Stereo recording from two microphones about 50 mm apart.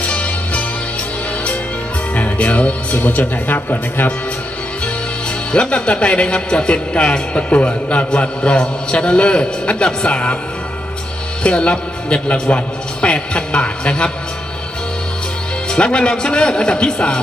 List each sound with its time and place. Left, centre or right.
0.0 s music: left
2.1 s music: left
2.9 s a man's voice: left
5.5 s speech: left
11.4 s speech: left
15.7 s speech: centre